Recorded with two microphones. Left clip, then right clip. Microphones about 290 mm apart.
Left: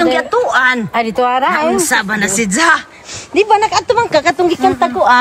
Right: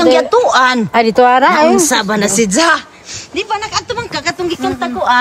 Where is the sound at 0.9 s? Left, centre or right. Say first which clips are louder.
Right 5 dB; right.